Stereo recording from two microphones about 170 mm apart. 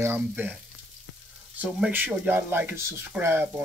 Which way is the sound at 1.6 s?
10° right (ahead or behind).